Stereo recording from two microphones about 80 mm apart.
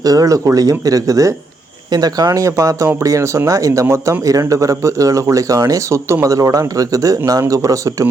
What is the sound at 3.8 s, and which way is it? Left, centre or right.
Speech, right.